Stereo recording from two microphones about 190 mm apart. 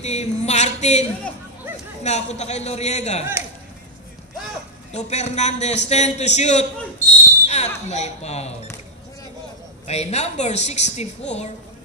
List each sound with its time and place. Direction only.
0.0 s a sound: 35° left (ahead or behind)
2.0 s a woman's voice: 35° left (ahead or behind)
4.9 s a woman's voice: 35° left (ahead or behind)
9.8 s a woman's voice: 35° left (ahead or behind)